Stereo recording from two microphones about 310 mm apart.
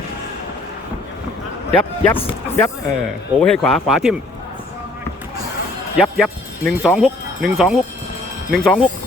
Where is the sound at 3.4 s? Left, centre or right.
Centre.